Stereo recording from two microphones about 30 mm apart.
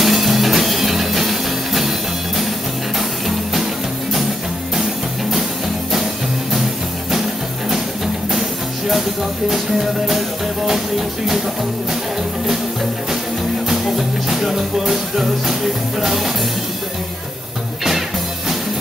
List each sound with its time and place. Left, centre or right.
0.0 s music: centre
8.3 s music: centre
13.9 s music: centre